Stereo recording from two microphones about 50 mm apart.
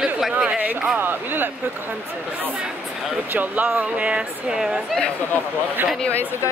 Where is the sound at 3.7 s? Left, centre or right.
Right.